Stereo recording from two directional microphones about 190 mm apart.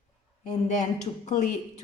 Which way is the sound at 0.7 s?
40° left (ahead or behind).